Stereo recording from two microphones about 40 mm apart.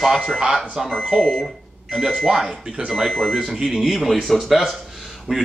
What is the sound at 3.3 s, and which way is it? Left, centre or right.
Speech, centre.